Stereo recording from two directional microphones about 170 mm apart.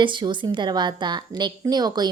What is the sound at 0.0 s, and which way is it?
A woman's voice, 30° right (ahead or behind).